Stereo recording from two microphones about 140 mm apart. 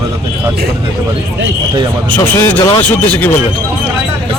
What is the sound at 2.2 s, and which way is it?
Speech, 15° left (ahead or behind).